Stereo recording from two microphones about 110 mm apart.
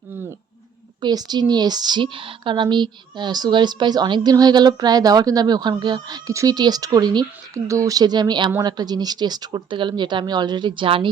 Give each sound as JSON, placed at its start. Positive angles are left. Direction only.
{"t": 1.0, "sound": "a woman's voice", "side_deg": -40}